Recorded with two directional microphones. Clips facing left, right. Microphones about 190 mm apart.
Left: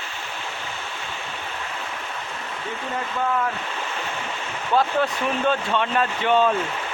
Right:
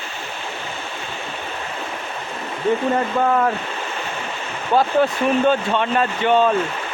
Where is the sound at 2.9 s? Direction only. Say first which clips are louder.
Right 7 dB; 55° right (ahead or behind).